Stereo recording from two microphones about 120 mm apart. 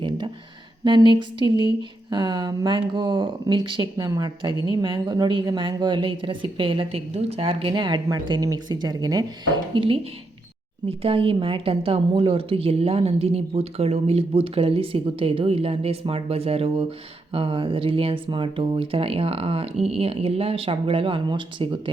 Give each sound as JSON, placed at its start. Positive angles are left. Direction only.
{"t": 0.9, "sound": "a woman's voice", "side_deg": -40}
{"t": 7.7, "sound": "speech", "side_deg": -40}
{"t": 9.7, "sound": "a woman's voice", "side_deg": -45}